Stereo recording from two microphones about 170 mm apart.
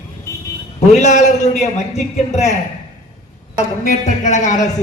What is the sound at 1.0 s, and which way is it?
A man's voice, 45° left (ahead or behind).